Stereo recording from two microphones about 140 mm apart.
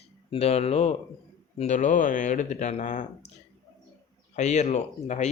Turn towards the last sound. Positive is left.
turn(degrees=55)  # may be behind; listen again after turning